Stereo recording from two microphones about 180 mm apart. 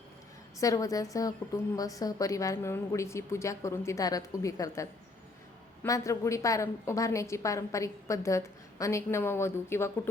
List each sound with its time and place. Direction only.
0.6 s a woman's voice: 20° left (ahead or behind)